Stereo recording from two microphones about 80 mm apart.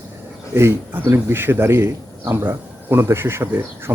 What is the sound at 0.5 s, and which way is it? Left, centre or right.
A man's voice, right.